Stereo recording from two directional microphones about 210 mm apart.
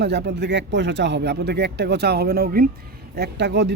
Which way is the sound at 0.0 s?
50° right (ahead or behind).